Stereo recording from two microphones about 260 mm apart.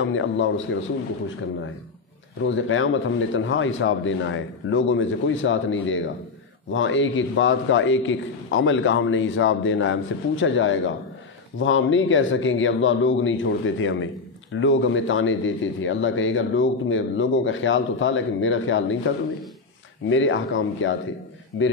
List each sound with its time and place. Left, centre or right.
0.0 s a man's voice: left
2.4 s a man's voice: left